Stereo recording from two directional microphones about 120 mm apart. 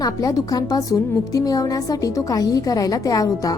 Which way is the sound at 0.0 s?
30° left (ahead or behind).